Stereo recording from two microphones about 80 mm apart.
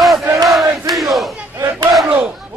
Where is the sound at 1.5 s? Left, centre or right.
Right.